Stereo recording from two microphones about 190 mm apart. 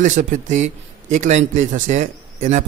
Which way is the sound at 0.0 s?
40° right (ahead or behind).